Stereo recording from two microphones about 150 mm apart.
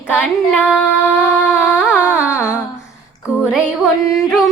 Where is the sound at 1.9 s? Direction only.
15° left (ahead or behind).